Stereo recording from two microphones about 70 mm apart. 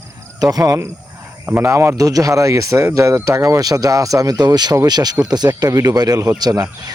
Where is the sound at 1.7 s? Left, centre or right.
Right.